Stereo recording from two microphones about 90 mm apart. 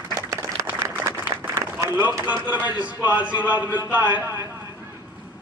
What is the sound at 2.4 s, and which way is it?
A man's voice, 20° right (ahead or behind).